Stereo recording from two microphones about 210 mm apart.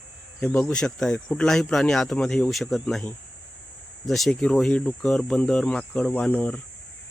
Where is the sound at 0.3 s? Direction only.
5° left (ahead or behind).